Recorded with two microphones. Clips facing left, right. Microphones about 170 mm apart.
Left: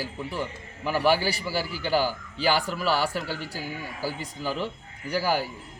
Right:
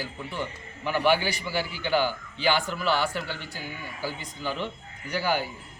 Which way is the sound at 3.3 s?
40° left (ahead or behind).